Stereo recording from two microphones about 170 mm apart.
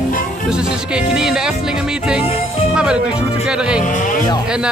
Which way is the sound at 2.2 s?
35° left (ahead or behind).